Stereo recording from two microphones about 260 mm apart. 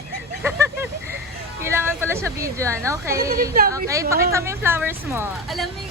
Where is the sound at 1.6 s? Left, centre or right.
Centre.